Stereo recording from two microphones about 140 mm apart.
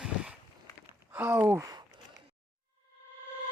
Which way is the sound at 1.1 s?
10° right (ahead or behind).